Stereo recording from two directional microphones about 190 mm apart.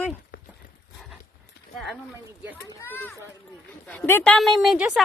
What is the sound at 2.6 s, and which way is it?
A woman's voice, 10° left (ahead or behind).